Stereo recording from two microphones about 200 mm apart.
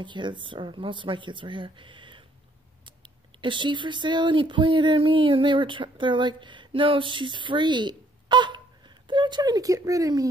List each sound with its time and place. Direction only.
0.0 s speech: 25° right (ahead or behind)